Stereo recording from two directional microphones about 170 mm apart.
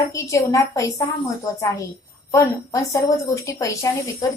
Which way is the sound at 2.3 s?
15° left (ahead or behind).